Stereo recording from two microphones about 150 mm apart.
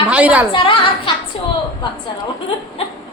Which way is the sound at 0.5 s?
35° left (ahead or behind).